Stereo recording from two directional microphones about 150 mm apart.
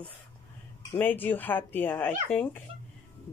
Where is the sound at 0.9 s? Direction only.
10° left (ahead or behind).